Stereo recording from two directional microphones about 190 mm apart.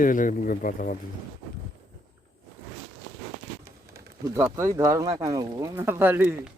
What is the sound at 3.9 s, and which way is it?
Speech, 15° right (ahead or behind).